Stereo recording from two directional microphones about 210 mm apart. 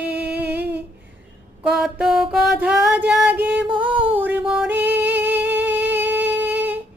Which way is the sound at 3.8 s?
25° right (ahead or behind).